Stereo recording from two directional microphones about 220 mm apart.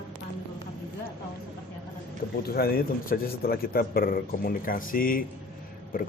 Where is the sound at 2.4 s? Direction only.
45° left (ahead or behind).